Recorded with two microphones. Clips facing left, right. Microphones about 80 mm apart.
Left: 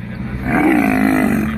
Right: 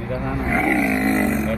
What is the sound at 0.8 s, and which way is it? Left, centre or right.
Roaring cats, left.